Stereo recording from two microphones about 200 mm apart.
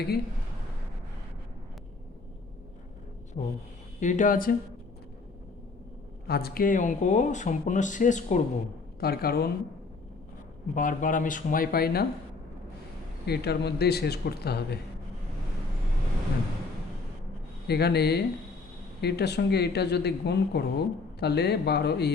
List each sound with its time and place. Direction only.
3.3 s speech: 35° left (ahead or behind)
6.2 s speech: 50° left (ahead or behind)
9.0 s speech: 50° left (ahead or behind)
10.8 s speech: 40° left (ahead or behind)
13.2 s speech: 55° left (ahead or behind)
17.7 s speech: 55° left (ahead or behind)